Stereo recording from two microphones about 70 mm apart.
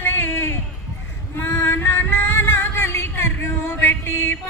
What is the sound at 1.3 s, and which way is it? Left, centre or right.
Music, left.